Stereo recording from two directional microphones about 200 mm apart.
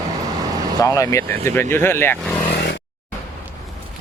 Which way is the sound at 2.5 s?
55° left (ahead or behind).